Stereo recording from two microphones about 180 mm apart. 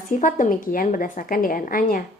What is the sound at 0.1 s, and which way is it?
A woman's voice, 45° left (ahead or behind).